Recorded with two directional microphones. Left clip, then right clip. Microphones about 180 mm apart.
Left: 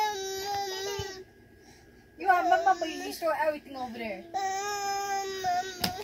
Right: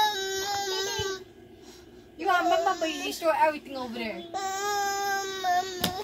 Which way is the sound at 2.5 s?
10° right (ahead or behind).